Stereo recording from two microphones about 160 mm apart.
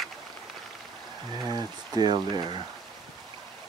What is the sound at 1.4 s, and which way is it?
Speech, 25° right (ahead or behind).